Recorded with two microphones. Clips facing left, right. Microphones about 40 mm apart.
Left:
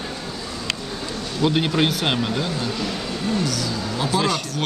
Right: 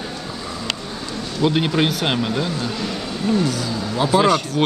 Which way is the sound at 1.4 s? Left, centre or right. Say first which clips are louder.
Right 1 dB; centre.